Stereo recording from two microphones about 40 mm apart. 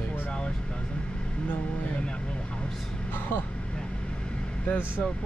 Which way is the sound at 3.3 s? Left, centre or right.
Left.